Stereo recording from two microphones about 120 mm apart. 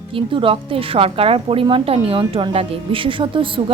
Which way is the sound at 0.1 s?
45° right (ahead or behind).